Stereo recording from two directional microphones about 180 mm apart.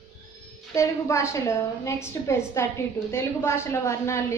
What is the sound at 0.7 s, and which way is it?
A woman's voice, 15° left (ahead or behind).